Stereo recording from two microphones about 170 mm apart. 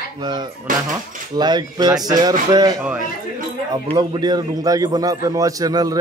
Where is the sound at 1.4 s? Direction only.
25° right (ahead or behind).